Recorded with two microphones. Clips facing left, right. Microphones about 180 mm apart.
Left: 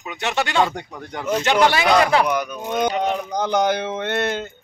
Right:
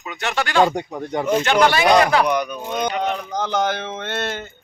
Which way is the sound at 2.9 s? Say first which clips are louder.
Left 1 dB; 15° left (ahead or behind).